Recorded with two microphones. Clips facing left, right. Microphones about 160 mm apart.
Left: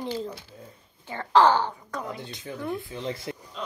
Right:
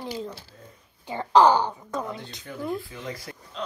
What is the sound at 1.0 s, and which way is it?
Speech, 15° right (ahead or behind).